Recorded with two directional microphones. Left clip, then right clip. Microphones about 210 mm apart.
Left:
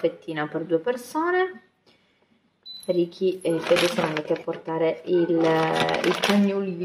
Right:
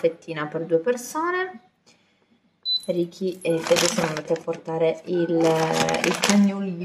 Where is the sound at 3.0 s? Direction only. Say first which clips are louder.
Left 3 dB; 20° right (ahead or behind).